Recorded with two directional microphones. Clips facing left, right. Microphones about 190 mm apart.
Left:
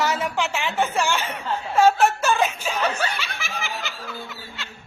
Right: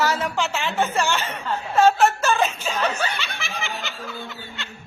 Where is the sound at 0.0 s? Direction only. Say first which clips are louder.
Right 1 dB; 15° left (ahead or behind).